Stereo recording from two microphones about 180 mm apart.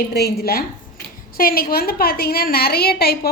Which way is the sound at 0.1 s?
65° left (ahead or behind).